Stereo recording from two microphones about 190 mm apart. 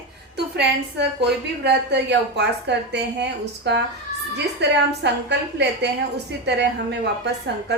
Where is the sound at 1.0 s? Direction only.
65° right (ahead or behind).